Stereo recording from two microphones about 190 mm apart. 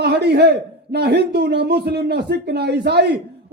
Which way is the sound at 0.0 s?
60° right (ahead or behind).